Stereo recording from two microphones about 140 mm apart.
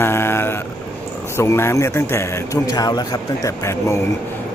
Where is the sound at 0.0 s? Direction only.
15° left (ahead or behind).